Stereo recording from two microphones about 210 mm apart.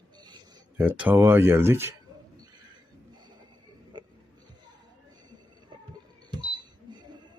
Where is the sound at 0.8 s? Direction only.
10° right (ahead or behind).